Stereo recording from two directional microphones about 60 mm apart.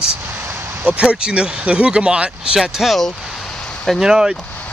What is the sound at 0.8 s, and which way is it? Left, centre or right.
Speech, centre.